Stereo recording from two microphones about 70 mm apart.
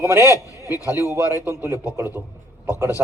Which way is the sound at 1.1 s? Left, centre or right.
Right.